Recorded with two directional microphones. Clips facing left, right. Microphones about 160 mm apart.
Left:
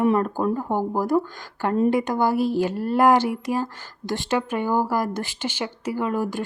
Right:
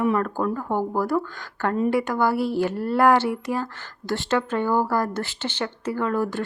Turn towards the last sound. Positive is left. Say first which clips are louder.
# even
turn(degrees=15)  # may be behind; listen again after turning